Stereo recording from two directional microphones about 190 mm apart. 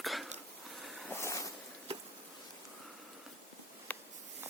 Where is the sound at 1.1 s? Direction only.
15° left (ahead or behind).